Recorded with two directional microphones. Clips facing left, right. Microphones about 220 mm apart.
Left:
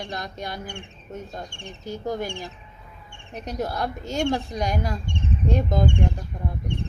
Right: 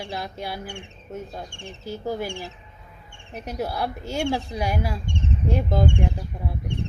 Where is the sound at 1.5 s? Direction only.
15° left (ahead or behind).